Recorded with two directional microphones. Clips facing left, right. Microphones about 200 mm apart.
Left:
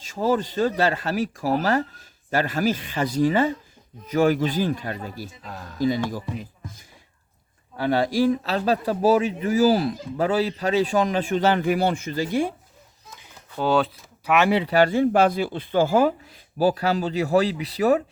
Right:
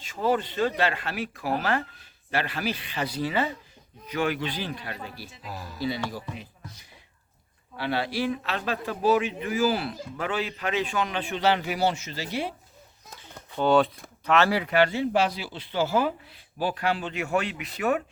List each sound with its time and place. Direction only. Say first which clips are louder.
0.0 s a man's voice: left 3 dB; 40° left (ahead or behind)
5.4 s speech: left 1 dB; 5° right (ahead or behind)
5.8 s speech: left 7 dB; 45° left (ahead or behind)
7.8 s a man's voice: left 7 dB; 45° left (ahead or behind)
13.6 s speech: even; centre (ahead or behind)
14.3 s speech: left 3 dB; 15° left (ahead or behind)
14.6 s a man's voice: left 5 dB; 35° left (ahead or behind)